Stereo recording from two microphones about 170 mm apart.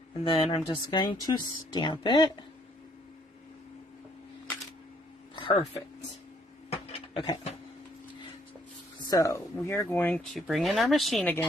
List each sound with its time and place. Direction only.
0.3 s speech: 30° left (ahead or behind)
5.3 s a sound: 30° left (ahead or behind)
7.2 s speech: 35° left (ahead or behind)
9.0 s speech: 20° left (ahead or behind)